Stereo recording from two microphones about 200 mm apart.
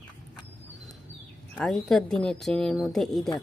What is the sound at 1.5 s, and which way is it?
Speech, centre (ahead or behind).